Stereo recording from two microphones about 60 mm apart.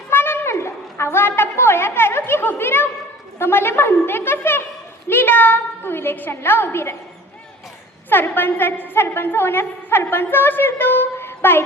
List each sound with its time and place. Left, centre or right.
0.1 s a sound: left
3.3 s a woman's voice: left
8.1 s a woman's voice: left